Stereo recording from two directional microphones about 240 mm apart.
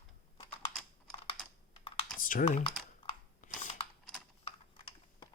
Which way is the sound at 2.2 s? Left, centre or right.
Left.